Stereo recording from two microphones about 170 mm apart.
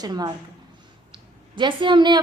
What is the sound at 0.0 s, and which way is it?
A woman's voice, 25° right (ahead or behind).